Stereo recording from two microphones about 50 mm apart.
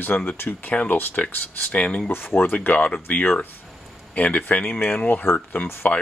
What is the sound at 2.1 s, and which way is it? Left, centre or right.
Speech, left.